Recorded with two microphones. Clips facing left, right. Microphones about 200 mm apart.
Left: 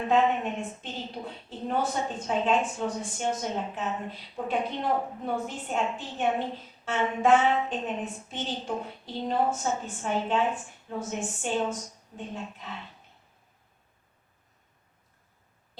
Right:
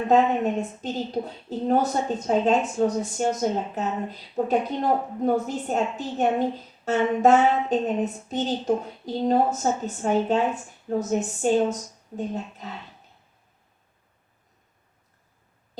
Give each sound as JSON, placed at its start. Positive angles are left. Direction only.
{"t": 0.1, "sound": "a woman's voice", "side_deg": -40}